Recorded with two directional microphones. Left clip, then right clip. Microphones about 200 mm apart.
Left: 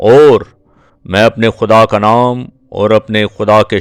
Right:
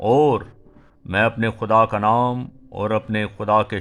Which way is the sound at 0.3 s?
35° left (ahead or behind).